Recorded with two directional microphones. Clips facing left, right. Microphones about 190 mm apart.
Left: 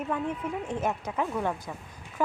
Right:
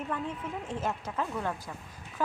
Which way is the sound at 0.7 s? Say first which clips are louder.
Left 2 dB; 15° left (ahead or behind).